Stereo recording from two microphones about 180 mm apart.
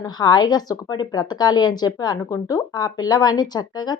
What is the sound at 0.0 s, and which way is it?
Speech, 20° left (ahead or behind).